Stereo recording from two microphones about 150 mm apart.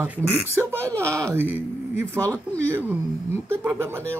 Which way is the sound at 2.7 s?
15° right (ahead or behind).